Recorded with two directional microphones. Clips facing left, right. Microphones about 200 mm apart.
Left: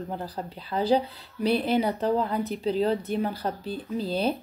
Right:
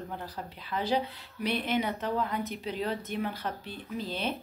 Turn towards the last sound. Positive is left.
turn(degrees=35)  # may be behind; listen again after turning